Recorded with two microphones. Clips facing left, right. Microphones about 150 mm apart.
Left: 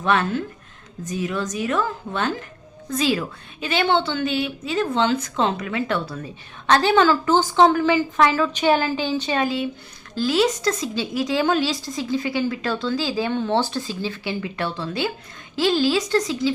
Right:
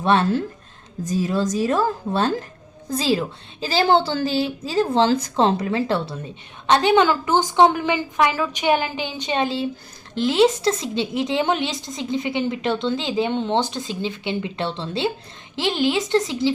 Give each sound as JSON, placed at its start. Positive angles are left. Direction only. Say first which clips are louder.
{"t": 0.0, "sound": "a woman's voice", "louder": "right 3 dB", "side_deg": -30}
{"t": 6.7, "sound": "a woman's voice", "louder": "even", "side_deg": -20}